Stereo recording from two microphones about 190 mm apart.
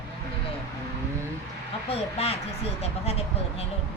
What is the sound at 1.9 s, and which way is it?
Speech, 30° left (ahead or behind).